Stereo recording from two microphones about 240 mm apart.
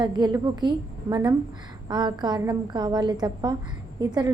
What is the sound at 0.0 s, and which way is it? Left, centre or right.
A woman's voice, centre.